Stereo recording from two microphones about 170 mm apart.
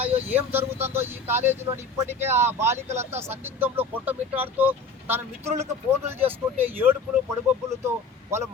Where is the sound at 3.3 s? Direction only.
10° right (ahead or behind).